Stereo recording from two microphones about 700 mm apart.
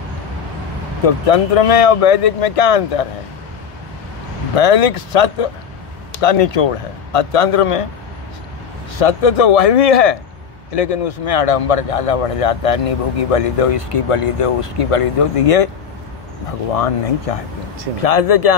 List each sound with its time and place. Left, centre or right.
1.0 s a man's voice: left
4.6 s a man's voice: left
8.9 s a man's voice: left
16.7 s a man's voice: left